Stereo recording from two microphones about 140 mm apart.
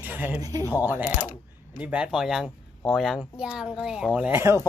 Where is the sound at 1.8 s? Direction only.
10° right (ahead or behind).